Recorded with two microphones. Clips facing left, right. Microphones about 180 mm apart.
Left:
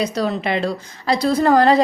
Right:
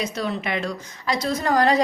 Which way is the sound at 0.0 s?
35° left (ahead or behind).